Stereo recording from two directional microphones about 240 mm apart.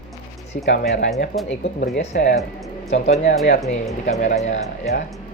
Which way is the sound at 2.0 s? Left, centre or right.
Left.